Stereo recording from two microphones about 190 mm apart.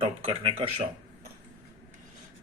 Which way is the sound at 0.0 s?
30° right (ahead or behind).